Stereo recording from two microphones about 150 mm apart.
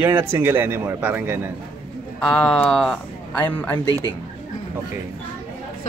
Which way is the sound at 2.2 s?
5° left (ahead or behind).